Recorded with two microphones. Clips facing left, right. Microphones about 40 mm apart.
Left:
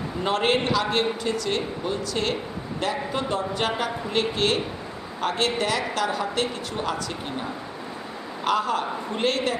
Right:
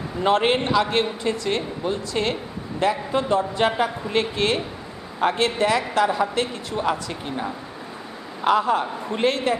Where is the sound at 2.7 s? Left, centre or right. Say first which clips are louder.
Right 5 dB; right.